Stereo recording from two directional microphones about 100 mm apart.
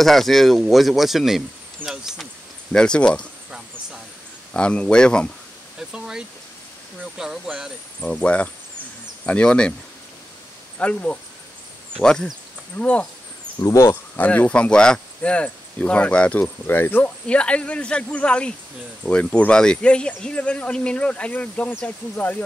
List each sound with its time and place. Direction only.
0.0 s speech: centre (ahead or behind)
1.9 s vehicle: 5° right (ahead or behind)
2.7 s speech: 10° left (ahead or behind)
4.6 s speech: 10° left (ahead or behind)
5.8 s a sound: 5° right (ahead or behind)
7.2 s speech: 5° right (ahead or behind)
8.0 s speech: 15° left (ahead or behind)
10.8 s speech: 15° left (ahead or behind)
13.6 s speech: 30° left (ahead or behind)
14.1 s speech: 15° left (ahead or behind)